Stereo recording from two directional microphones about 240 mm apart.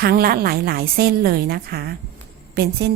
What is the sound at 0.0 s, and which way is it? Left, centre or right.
A woman's voice, right.